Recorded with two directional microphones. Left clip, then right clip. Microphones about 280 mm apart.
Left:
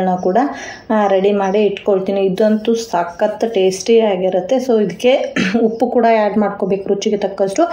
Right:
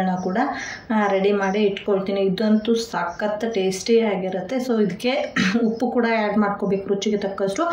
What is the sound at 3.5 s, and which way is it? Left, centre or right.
Speech, centre.